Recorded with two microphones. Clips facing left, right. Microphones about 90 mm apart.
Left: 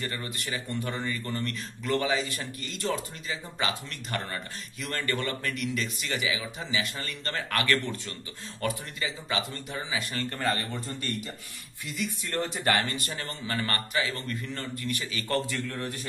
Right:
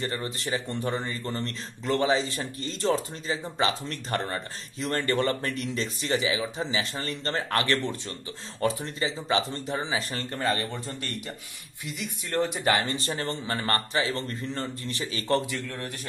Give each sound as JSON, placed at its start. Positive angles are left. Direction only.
{"t": 0.0, "sound": "speech", "side_deg": -25}
{"t": 10.7, "sound": "speech", "side_deg": 0}
{"t": 12.0, "sound": "speech", "side_deg": -15}